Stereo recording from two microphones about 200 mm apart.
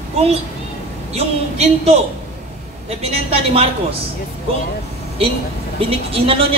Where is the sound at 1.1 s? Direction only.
30° right (ahead or behind).